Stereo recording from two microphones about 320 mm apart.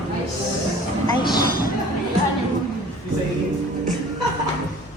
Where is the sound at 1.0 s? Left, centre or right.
Centre.